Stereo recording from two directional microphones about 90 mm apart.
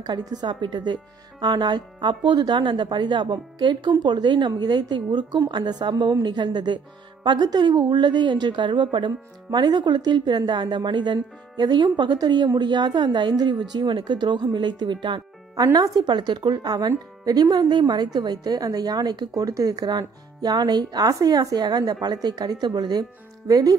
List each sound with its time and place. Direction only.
0.0 s a woman's voice: 50° right (ahead or behind)
15.5 s speech: 45° right (ahead or behind)